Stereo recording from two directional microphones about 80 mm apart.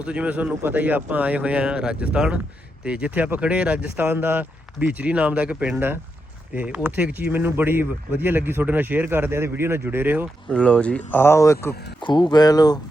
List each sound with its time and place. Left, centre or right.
0.0 s speech: centre
4.0 s speech: right
10.5 s speech: centre
11.2 s speech: left
12.0 s speech: left